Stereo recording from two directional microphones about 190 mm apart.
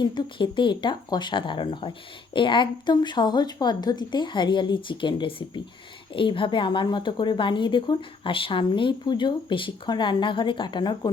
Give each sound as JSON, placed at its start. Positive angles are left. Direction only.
{"t": 0.0, "sound": "speech", "side_deg": 25}